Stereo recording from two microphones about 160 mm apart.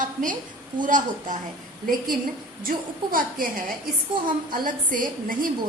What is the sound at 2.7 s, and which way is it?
A woman's voice, 60° right (ahead or behind).